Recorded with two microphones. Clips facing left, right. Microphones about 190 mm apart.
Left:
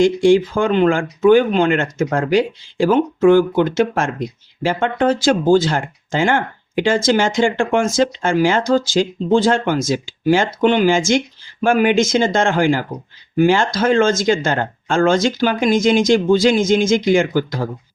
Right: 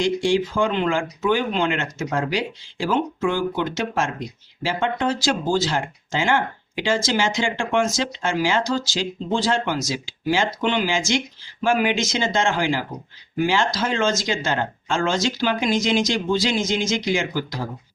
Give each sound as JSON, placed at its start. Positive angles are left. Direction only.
{"t": 0.0, "sound": "speech", "side_deg": 55}